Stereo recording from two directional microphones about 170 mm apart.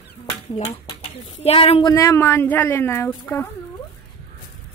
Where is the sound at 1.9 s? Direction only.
20° left (ahead or behind).